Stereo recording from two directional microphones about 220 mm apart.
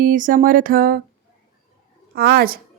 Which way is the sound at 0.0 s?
35° right (ahead or behind).